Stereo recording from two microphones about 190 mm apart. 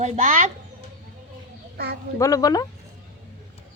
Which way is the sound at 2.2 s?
20° left (ahead or behind).